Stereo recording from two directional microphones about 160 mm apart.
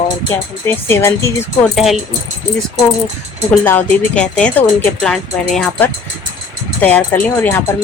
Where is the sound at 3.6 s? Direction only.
10° left (ahead or behind).